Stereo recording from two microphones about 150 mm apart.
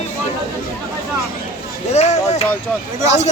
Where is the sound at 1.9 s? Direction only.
50° left (ahead or behind).